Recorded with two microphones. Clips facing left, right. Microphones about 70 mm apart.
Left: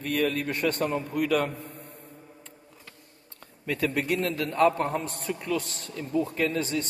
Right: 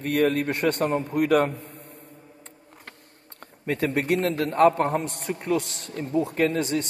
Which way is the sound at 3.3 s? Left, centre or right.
Right.